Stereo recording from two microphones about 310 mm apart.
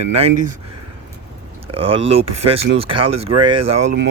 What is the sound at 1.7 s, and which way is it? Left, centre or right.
Speech, centre.